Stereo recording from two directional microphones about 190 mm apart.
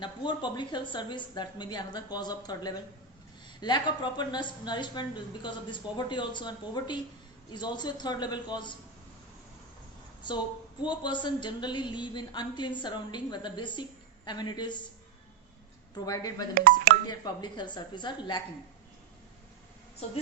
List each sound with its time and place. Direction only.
0.0 s speech: 25° left (ahead or behind)
10.8 s speech: 25° left (ahead or behind)
16.0 s speech: 20° left (ahead or behind)
16.6 s speech: 45° right (ahead or behind)
17.1 s speech: 20° left (ahead or behind)